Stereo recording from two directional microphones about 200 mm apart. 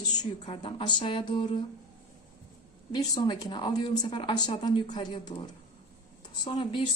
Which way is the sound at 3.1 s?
20° left (ahead or behind).